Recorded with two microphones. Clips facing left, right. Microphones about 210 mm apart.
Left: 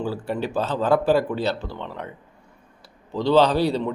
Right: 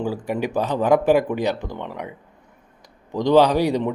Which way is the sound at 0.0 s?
15° right (ahead or behind).